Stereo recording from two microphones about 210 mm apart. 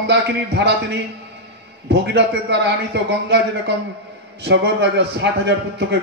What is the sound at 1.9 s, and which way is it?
A man's voice, 55° right (ahead or behind).